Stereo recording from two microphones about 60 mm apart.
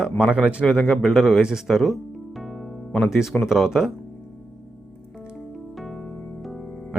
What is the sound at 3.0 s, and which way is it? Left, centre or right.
Speech, centre.